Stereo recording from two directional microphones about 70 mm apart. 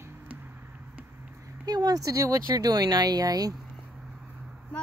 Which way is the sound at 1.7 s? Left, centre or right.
Right.